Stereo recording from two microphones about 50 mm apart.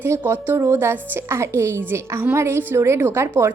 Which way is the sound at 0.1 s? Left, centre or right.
Right.